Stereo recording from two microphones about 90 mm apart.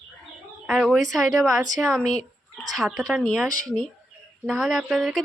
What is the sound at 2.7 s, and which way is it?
A woman's voice, centre (ahead or behind).